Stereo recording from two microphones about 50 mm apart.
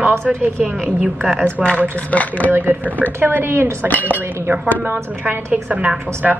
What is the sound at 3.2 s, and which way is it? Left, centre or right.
Speech, right.